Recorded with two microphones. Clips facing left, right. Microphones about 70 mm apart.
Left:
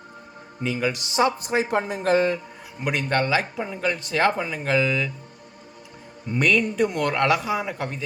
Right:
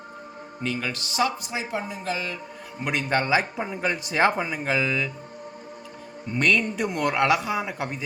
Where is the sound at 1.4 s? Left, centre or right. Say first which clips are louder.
Left 7 dB; left.